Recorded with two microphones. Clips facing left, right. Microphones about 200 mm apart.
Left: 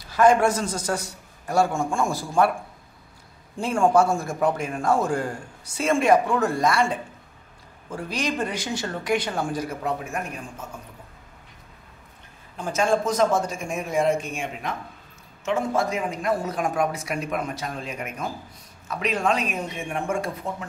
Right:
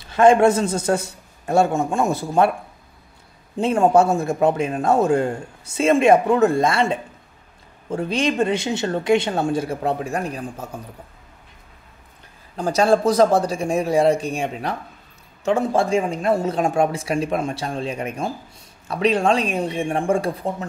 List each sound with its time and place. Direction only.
0.0 s a man's voice: 25° right (ahead or behind)
3.5 s a man's voice: 20° right (ahead or behind)
12.5 s a man's voice: 40° right (ahead or behind)